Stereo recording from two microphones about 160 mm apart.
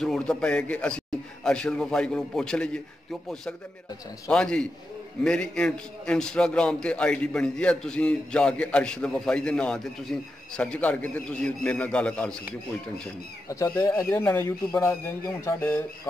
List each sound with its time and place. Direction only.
0.0 s a man's voice: 5° left (ahead or behind)
13.5 s speech: 15° left (ahead or behind)